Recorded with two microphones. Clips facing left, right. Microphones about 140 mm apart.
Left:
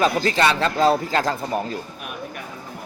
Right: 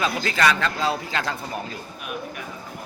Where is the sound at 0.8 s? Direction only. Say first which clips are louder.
Left 7 dB; 40° left (ahead or behind).